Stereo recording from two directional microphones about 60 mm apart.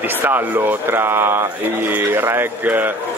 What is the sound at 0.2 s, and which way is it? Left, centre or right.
A man's voice, right.